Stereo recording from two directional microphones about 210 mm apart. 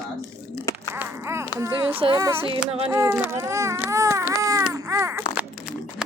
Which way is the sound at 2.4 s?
25° right (ahead or behind).